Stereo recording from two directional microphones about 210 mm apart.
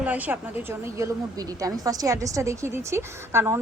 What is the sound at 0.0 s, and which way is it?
A woman's voice, 10° right (ahead or behind).